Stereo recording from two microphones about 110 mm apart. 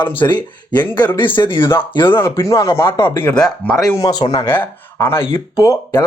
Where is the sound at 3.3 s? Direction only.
5° left (ahead or behind).